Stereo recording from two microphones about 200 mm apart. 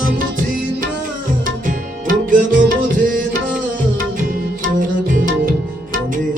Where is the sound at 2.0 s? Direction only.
40° right (ahead or behind).